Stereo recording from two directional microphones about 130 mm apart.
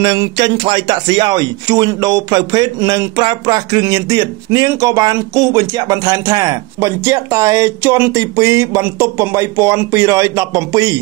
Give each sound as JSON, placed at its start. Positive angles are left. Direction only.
{"t": 0.0, "sound": "speech", "side_deg": -35}